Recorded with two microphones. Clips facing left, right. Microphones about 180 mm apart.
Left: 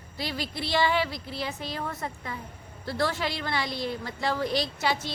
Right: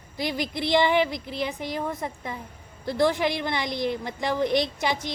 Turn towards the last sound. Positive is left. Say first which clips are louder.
# right 3 dB
turn(degrees=-15)  # may be behind; listen again after turning